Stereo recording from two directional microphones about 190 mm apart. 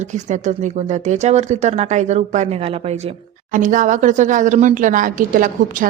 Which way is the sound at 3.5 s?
45° right (ahead or behind).